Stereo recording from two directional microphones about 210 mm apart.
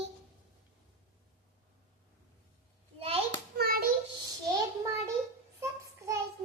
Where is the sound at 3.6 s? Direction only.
45° right (ahead or behind).